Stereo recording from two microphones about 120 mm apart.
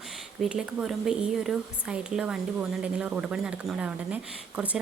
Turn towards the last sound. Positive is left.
turn(degrees=-10)  # may be behind; listen again after turning